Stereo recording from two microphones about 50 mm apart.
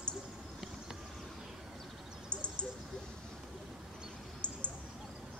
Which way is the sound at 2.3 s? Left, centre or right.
Left.